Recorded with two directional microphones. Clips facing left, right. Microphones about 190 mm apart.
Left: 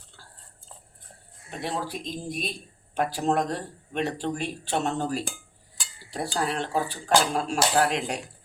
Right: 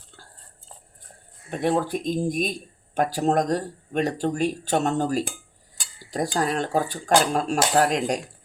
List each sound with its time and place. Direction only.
1.5 s speech: 50° right (ahead or behind)
6.3 s speech: 40° right (ahead or behind)